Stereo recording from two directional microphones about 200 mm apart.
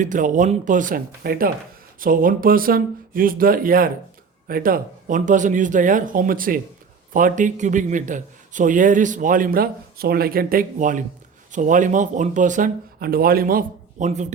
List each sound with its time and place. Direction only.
0.0 s a man's voice: 40° right (ahead or behind)